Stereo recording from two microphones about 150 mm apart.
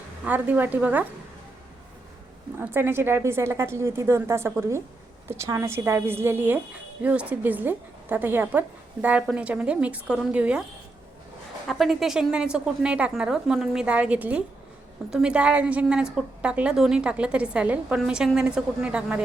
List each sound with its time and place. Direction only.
0.3 s a woman's voice: 10° right (ahead or behind)
2.6 s a woman's voice: 15° right (ahead or behind)
11.7 s a woman's voice: centre (ahead or behind)